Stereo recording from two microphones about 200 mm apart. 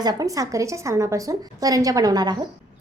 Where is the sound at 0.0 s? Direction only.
20° right (ahead or behind).